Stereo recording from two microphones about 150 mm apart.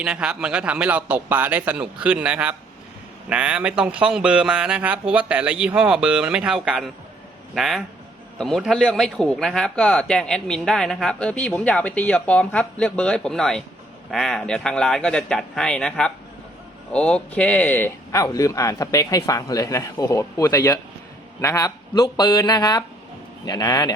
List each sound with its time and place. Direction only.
0.0 s a man's voice: 5° right (ahead or behind); by 23.9 s 25° left (ahead or behind)